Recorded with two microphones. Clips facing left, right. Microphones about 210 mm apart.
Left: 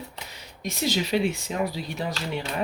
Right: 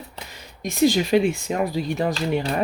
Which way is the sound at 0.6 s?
50° right (ahead or behind).